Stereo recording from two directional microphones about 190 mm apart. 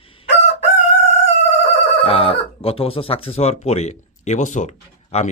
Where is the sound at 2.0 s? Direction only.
30° left (ahead or behind).